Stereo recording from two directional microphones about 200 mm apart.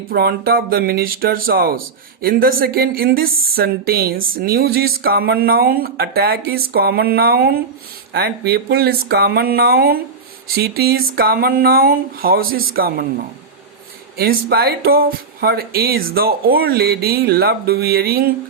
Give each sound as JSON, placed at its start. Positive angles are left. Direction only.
{"t": 0.1, "sound": "speech", "side_deg": -50}
{"t": 14.2, "sound": "speech", "side_deg": -50}